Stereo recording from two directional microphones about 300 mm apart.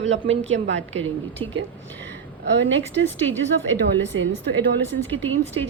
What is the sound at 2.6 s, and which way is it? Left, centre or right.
A woman's voice, right.